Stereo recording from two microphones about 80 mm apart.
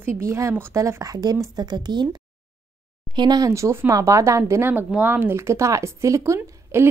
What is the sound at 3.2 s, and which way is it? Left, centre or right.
Speech, right.